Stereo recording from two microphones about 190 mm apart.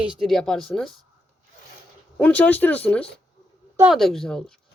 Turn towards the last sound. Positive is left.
turn(degrees=5)  # may be behind; listen again after turning